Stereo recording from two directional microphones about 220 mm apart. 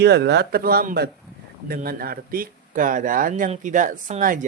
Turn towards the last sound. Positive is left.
turn(degrees=-35)  # may be behind; listen again after turning